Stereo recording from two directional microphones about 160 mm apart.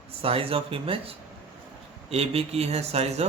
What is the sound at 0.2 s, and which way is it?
Speech, 35° right (ahead or behind).